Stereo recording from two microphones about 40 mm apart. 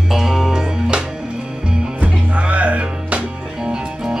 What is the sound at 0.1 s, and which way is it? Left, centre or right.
Music, centre.